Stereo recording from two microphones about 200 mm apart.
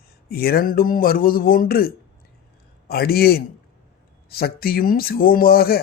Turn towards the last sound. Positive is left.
turn(degrees=50)  # may be behind; listen again after turning